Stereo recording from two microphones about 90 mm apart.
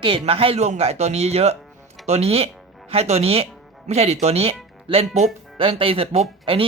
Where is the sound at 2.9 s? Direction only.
90° right.